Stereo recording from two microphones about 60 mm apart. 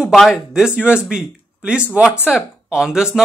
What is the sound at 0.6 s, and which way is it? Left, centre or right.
Speech, centre.